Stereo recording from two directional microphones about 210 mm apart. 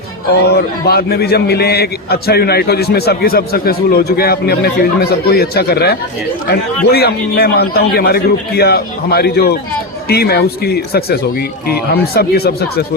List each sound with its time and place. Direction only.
0.5 s a man's voice: 50° left (ahead or behind)